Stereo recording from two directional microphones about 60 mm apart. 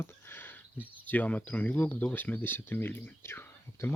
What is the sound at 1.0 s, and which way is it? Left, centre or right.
Speech, left.